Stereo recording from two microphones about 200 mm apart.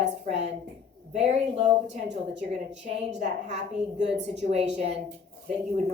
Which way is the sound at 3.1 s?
35° right (ahead or behind).